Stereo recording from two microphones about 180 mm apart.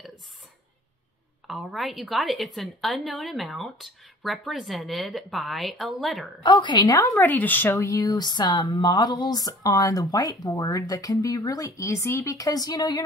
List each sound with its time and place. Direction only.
1.5 s a woman's voice: centre (ahead or behind)
6.4 s speech: 25° left (ahead or behind)